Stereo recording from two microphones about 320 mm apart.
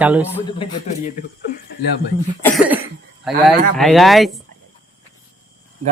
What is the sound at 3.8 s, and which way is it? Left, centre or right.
Speech, centre.